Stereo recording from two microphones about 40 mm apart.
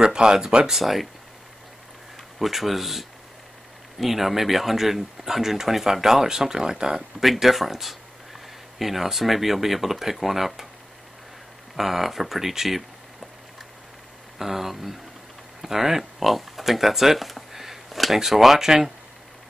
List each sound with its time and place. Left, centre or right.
0.0 s speech: centre
0.7 s speech: centre
2.3 s speech: centre
7.0 s speech: centre
11.7 s speech: centre
14.4 s speech: centre